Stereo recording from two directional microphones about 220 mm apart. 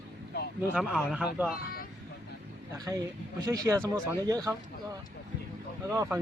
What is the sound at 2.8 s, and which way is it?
A man's voice, 15° right (ahead or behind).